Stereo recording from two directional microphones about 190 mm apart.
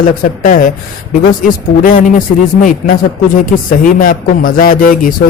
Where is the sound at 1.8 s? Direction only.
45° left (ahead or behind).